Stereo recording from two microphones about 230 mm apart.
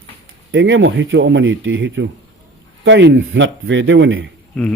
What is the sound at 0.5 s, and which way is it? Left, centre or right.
Speech, right.